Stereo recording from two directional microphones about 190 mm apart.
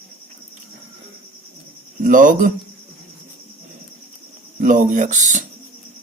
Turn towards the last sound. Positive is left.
turn(degrees=-40)  # may be behind; listen again after turning